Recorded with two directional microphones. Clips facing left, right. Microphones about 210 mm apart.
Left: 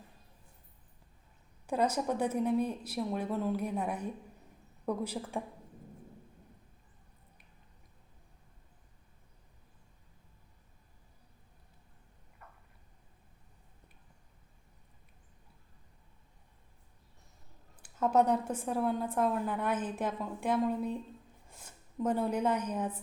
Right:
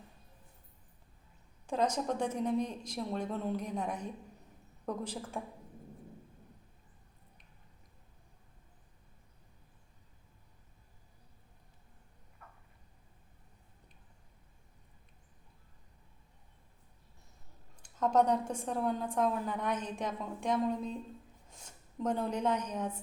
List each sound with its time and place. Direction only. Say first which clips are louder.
1.6 s speech: left 1 dB; 10° left (ahead or behind)
12.4 s a sound: left 1 dB; 5° left (ahead or behind)
17.8 s a woman's voice: left 1 dB; 5° left (ahead or behind)